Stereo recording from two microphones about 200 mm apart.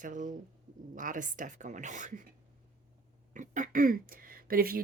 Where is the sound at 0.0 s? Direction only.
40° right (ahead or behind).